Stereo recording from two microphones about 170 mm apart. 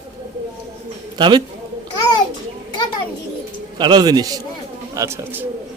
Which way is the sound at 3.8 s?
25° right (ahead or behind).